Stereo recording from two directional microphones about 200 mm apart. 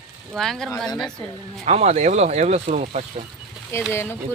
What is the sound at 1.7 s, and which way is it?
Speech, 35° right (ahead or behind).